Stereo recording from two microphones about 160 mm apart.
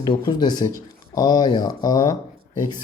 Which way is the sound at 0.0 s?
25° left (ahead or behind).